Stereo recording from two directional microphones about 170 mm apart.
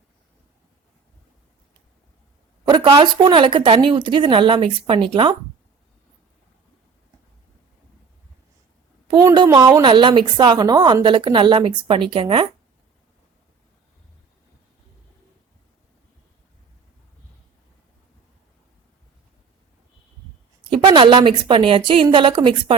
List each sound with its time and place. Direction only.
2.6 s a woman's voice: 25° right (ahead or behind)
9.2 s a woman's voice: 25° right (ahead or behind)
20.7 s a woman's voice: 30° right (ahead or behind)